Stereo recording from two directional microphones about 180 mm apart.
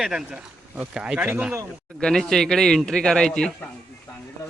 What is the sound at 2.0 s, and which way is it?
Speech, 5° left (ahead or behind).